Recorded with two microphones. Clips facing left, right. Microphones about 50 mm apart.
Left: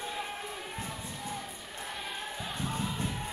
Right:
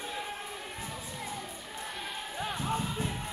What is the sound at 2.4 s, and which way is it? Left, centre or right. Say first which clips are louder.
Music: right 5 dB; right.